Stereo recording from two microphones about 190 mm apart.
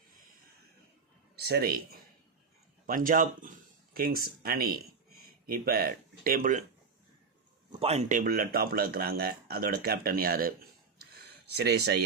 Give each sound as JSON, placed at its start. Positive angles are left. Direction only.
{"t": 1.5, "sound": "speech", "side_deg": -55}
{"t": 7.7, "sound": "speech", "side_deg": -30}
{"t": 11.5, "sound": "speech", "side_deg": -60}